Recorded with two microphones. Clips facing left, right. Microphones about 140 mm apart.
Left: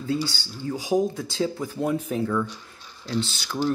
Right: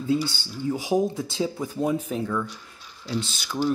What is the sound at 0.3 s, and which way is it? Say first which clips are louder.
Speech: right 3 dB; 20° right (ahead or behind).